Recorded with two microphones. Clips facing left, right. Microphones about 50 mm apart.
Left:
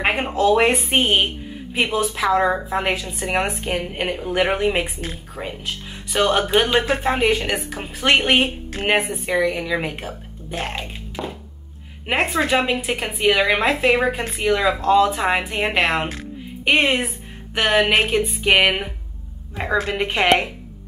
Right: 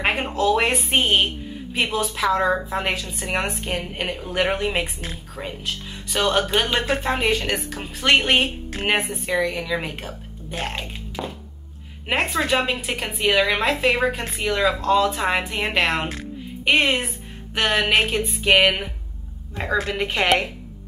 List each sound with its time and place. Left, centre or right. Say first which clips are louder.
0.0 s speech: left 2 dB; centre
0.3 s a woman's voice: left 5 dB; centre
6.1 s a woman's voice: left 3 dB; left
8.6 s speech: left 2 dB; centre
8.9 s a woman's voice: left 3 dB; centre
16.1 s music: even; centre
17.6 s a woman's voice: left 2 dB; centre